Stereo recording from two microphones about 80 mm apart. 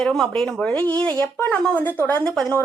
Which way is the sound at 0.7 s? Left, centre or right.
Centre.